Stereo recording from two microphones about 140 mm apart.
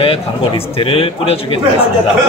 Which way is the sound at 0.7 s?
40° left (ahead or behind).